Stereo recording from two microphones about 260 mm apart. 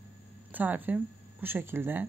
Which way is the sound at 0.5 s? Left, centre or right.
Centre.